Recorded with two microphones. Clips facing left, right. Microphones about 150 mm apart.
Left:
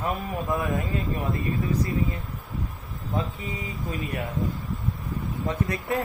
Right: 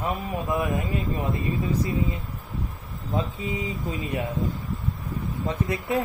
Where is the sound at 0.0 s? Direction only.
20° right (ahead or behind).